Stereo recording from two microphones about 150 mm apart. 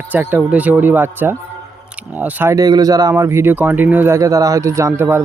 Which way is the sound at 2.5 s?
25° right (ahead or behind).